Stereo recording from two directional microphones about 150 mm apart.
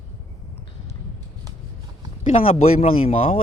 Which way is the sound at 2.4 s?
40° left (ahead or behind).